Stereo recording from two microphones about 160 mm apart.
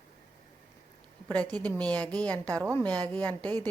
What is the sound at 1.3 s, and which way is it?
Speech, 10° left (ahead or behind).